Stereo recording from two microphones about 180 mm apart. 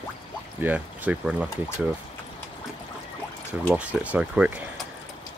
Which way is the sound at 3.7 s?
10° right (ahead or behind).